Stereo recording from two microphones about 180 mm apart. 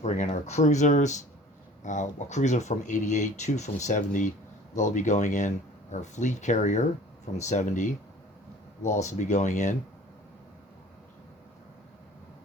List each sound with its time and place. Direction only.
0.0 s speech: 40° left (ahead or behind)